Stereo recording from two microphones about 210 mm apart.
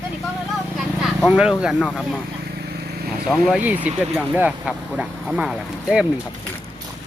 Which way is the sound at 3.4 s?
5° right (ahead or behind).